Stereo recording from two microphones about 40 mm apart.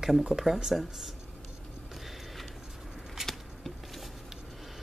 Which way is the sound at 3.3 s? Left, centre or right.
Centre.